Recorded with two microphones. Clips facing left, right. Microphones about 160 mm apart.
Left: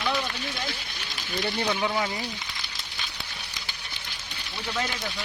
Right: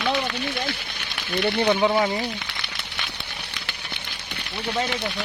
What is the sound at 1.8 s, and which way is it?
Speech, 30° right (ahead or behind).